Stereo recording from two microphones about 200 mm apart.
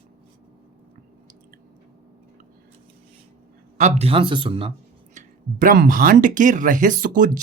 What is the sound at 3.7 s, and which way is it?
Speech, 35° right (ahead or behind).